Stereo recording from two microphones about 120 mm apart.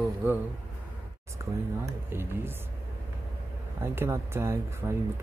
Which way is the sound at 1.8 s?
20° right (ahead or behind).